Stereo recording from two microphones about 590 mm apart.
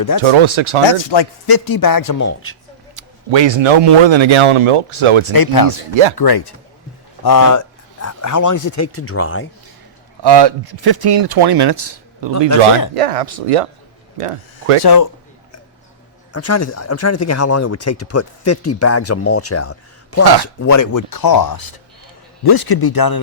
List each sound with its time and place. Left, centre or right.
0.2 s a man's voice: right
0.9 s a man's voice: left
2.9 s a man's voice: right
5.3 s a man's voice: left
10.2 s a man's voice: right
12.9 s speech: right
14.8 s a man's voice: left
16.3 s a man's voice: left